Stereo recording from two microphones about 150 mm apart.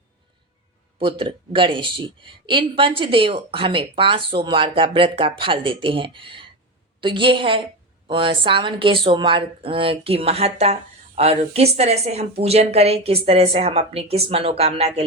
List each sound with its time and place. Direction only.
0.9 s a woman's voice: 35° right (ahead or behind)